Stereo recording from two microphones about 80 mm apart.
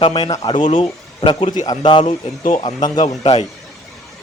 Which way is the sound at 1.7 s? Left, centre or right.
Left.